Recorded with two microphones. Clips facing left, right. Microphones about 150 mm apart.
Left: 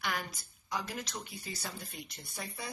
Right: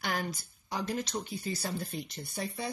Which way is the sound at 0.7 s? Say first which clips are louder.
Right 5 dB; 30° right (ahead or behind).